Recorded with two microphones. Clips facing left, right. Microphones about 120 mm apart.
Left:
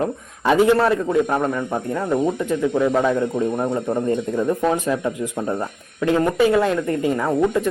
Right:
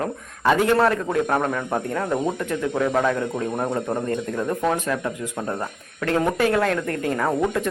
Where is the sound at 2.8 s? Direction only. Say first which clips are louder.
Left 2 dB; 10° left (ahead or behind).